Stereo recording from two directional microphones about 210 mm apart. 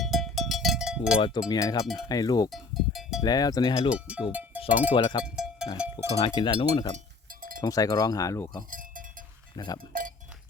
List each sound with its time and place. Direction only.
0.0 s cowbell: centre (ahead or behind)
1.5 s chink: 15° left (ahead or behind)
2.0 s speech: 20° left (ahead or behind)
2.5 s cowbell: centre (ahead or behind)
3.2 s speech: 20° left (ahead or behind)
3.9 s cowbell: 5° right (ahead or behind)
4.9 s speech: 20° left (ahead or behind)
5.2 s a sound: 5° right (ahead or behind)
5.7 s speech: 5° right (ahead or behind)
6.1 s speech: 25° left (ahead or behind)
7.6 s chink: 15° left (ahead or behind)
8.7 s sheep: 40° right (ahead or behind)
9.6 s speech: 20° left (ahead or behind)